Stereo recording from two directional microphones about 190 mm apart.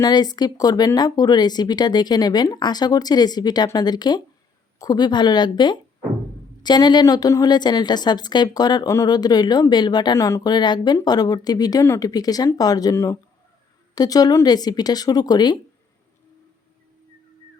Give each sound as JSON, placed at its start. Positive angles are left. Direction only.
{"t": 0.0, "sound": "a woman's voice", "side_deg": 20}